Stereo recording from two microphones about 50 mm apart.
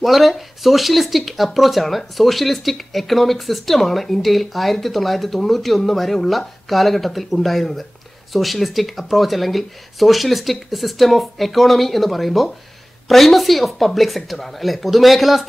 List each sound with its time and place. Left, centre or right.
0.0 s speech: centre